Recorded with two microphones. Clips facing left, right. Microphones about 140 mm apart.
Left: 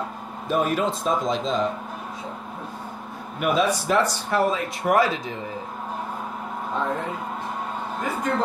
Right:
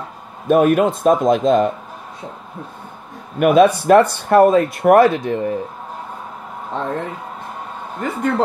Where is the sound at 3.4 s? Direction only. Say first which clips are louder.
Right 10 dB; 60° right (ahead or behind).